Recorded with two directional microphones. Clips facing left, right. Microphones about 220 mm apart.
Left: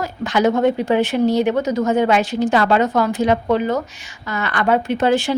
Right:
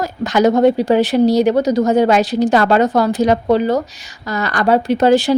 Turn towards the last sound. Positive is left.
turn(degrees=-35)  # may be behind; listen again after turning